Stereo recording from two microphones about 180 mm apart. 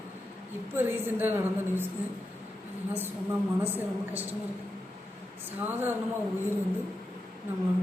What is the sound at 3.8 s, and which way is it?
Speech, 10° right (ahead or behind).